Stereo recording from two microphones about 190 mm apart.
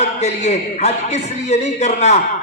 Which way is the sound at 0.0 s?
35° left (ahead or behind).